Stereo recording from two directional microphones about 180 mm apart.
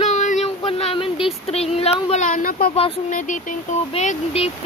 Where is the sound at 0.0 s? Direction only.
40° left (ahead or behind).